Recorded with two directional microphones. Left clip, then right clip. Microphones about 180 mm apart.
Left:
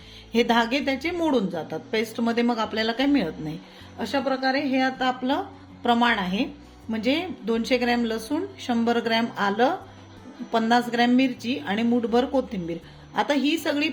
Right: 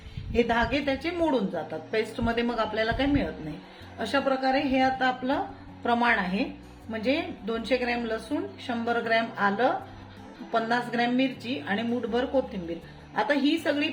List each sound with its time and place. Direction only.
0.3 s a woman's voice: 40° left (ahead or behind)
3.9 s a woman's voice: 15° left (ahead or behind)